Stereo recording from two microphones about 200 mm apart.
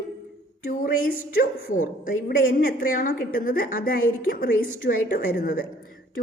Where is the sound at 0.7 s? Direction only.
45° left (ahead or behind).